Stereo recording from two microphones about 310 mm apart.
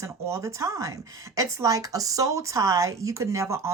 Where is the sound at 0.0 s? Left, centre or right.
Centre.